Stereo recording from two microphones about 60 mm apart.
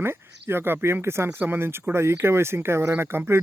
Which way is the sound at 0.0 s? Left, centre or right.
Right.